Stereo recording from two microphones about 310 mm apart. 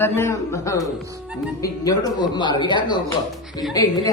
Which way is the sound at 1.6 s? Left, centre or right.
Centre.